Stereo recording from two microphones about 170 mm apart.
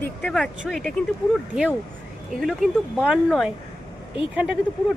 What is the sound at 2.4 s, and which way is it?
Speech, 5° right (ahead or behind).